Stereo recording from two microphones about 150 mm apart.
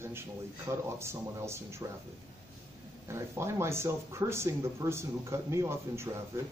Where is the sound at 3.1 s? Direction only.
15° right (ahead or behind).